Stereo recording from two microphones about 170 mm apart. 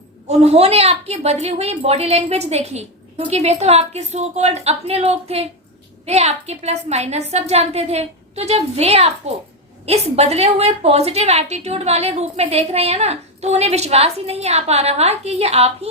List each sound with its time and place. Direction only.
0.3 s a woman's voice: 40° right (ahead or behind)